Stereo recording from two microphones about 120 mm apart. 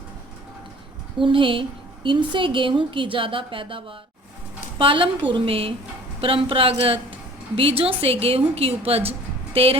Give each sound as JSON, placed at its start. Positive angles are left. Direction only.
{"t": 1.2, "sound": "a woman's voice", "side_deg": -45}